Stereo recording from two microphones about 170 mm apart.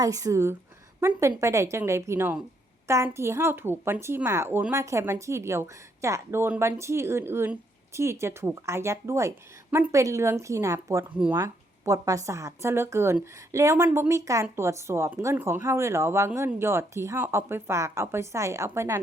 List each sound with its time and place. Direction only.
0.0 s a woman's voice: 20° right (ahead or behind)